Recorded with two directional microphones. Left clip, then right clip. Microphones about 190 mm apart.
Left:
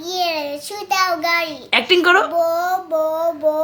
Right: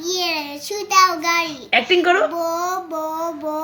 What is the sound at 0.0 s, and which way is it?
Child singing, 15° left (ahead or behind).